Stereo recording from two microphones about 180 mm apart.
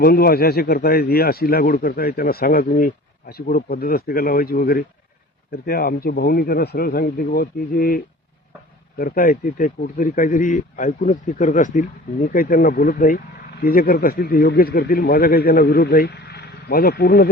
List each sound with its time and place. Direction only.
0.0 s speech: 60° left (ahead or behind)